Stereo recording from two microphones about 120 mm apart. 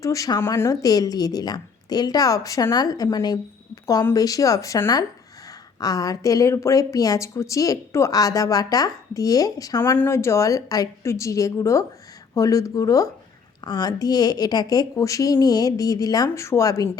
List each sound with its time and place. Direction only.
0.0 s a woman's voice: 30° left (ahead or behind)